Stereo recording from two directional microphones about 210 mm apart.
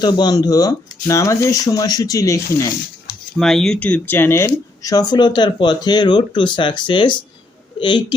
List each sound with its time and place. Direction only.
0.0 s speech: 20° left (ahead or behind)
3.3 s a woman's voice: centre (ahead or behind); by 8.0 s 20° left (ahead or behind)